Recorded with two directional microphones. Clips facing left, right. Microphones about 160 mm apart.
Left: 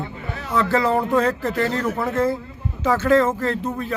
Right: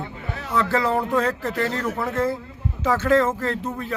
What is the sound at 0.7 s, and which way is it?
A man's voice, 25° left (ahead or behind).